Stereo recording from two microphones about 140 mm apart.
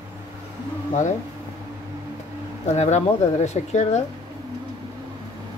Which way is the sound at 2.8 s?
55° left (ahead or behind).